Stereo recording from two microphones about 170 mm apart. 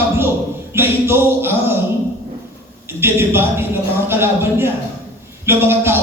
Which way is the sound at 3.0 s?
15° right (ahead or behind).